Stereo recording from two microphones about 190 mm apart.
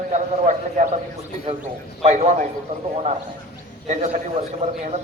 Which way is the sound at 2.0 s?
35° right (ahead or behind).